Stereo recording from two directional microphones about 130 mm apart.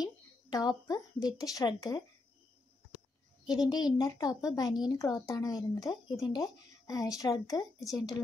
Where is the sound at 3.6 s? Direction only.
30° left (ahead or behind).